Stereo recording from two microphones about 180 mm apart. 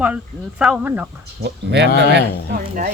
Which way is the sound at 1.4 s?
65° right (ahead or behind).